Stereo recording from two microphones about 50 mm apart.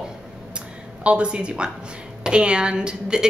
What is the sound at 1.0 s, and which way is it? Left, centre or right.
A woman's voice, right.